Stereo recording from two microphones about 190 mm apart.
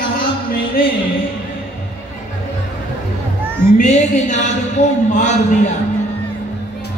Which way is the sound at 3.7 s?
40° left (ahead or behind).